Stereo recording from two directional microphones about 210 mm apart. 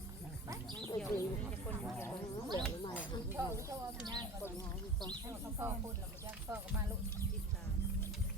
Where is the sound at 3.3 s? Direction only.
10° right (ahead or behind).